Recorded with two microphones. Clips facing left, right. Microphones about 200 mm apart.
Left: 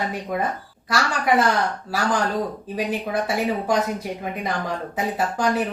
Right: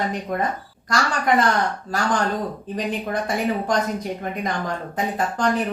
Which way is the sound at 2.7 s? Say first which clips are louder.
Even; 10° left (ahead or behind).